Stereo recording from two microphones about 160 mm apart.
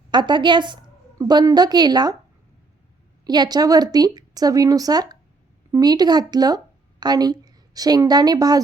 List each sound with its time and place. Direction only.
0.1 s a woman's voice: 30° right (ahead or behind)
3.2 s a woman's voice: 25° right (ahead or behind)